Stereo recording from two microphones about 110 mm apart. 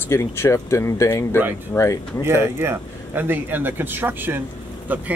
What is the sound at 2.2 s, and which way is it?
A man's voice, 20° right (ahead or behind).